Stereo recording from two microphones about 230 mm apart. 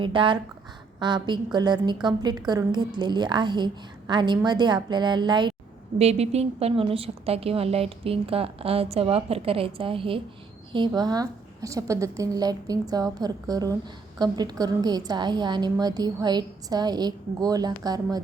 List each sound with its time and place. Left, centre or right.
0.0 s a woman's voice: right